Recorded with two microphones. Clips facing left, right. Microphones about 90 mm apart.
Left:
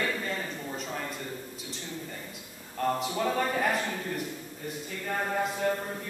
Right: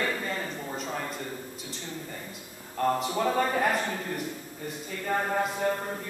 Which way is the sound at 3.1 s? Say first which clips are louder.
Right 2 dB; 15° right (ahead or behind).